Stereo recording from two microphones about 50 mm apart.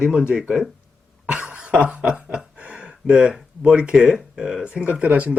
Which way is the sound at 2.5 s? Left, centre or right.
Right.